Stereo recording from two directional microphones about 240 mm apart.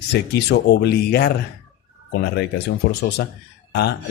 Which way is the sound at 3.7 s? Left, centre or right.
Left.